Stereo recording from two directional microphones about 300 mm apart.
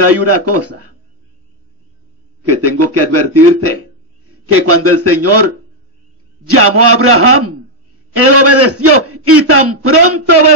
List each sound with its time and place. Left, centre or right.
0.0 s a man's voice: right
2.4 s a man's voice: right